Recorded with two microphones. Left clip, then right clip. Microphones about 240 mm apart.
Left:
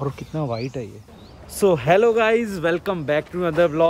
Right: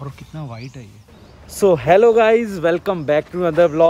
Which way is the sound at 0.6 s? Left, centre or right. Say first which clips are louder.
Left 9 dB; centre.